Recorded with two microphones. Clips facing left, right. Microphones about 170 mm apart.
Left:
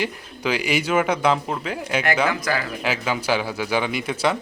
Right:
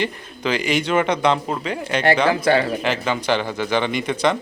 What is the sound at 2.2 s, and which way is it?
Speech, 30° right (ahead or behind).